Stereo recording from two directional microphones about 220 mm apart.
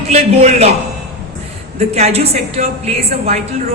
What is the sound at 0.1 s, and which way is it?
Speech, 25° right (ahead or behind).